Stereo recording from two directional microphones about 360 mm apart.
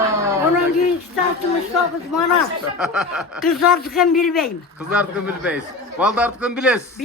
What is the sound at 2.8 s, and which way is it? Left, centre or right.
A man's voice, centre.